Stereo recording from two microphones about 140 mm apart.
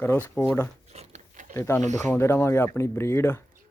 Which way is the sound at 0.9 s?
60° right (ahead or behind).